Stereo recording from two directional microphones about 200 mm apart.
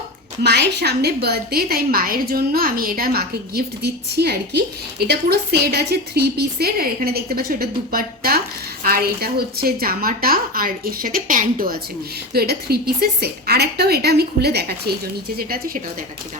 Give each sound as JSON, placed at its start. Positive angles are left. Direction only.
{"t": 0.4, "sound": "a woman's voice", "side_deg": -55}